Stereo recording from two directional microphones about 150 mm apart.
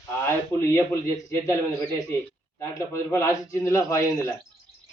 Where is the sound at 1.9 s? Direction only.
20° left (ahead or behind).